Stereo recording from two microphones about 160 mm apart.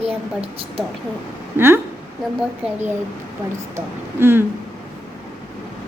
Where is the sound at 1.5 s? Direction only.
15° right (ahead or behind).